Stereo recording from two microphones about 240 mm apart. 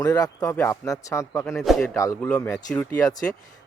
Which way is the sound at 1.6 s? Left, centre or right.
Centre.